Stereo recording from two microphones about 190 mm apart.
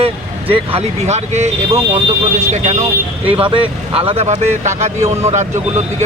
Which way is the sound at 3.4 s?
25° right (ahead or behind).